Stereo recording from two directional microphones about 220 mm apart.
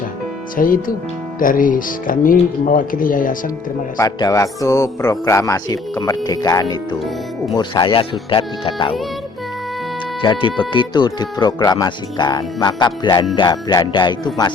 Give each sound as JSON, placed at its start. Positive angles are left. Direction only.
{"t": 0.5, "sound": "speech", "side_deg": 40}
{"t": 3.9, "sound": "speech", "side_deg": 15}
{"t": 10.2, "sound": "speech", "side_deg": 20}